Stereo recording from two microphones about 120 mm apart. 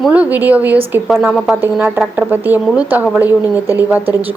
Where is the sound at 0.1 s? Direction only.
15° right (ahead or behind).